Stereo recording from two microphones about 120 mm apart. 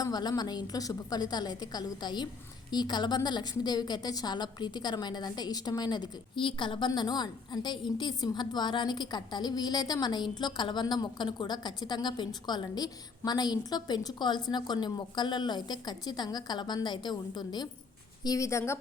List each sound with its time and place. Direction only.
0.0 s a woman's voice: 35° left (ahead or behind)